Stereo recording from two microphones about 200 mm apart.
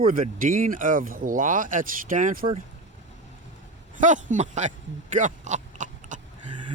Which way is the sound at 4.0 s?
40° right (ahead or behind).